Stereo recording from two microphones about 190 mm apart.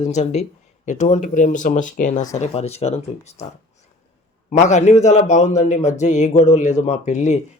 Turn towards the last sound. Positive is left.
turn(degrees=40)  # may be behind; listen again after turning